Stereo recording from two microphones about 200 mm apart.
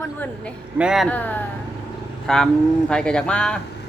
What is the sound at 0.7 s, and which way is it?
Speech, 5° right (ahead or behind).